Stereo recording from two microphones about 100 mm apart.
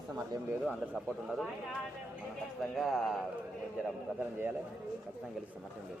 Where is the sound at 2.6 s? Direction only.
Centre (ahead or behind).